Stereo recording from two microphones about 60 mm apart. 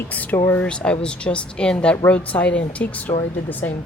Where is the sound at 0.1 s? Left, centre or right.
Left.